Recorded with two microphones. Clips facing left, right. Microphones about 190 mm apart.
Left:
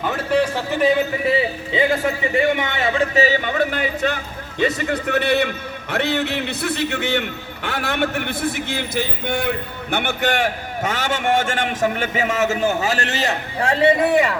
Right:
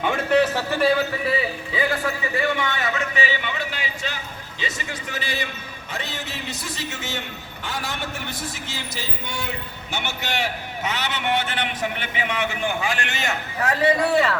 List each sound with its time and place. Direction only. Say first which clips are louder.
0.0 s a man's voice: even; 5° left (ahead or behind)